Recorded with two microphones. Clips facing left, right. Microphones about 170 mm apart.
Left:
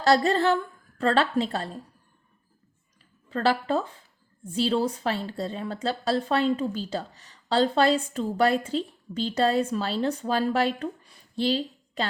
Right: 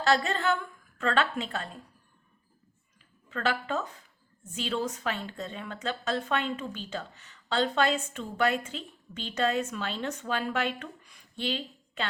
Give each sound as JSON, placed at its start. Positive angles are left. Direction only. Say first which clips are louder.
{"t": 0.0, "sound": "a woman's voice", "louder": "left 5 dB", "side_deg": 35}
{"t": 3.2, "sound": "a woman's voice", "louder": "left 6 dB", "side_deg": 35}